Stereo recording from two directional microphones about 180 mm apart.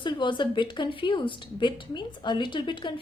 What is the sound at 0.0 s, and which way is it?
A woman's voice, 25° left (ahead or behind).